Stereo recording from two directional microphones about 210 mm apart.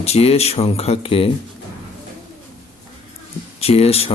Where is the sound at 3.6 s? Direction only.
30° left (ahead or behind).